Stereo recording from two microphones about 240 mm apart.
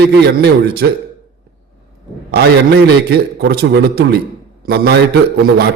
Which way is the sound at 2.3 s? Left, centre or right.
Right.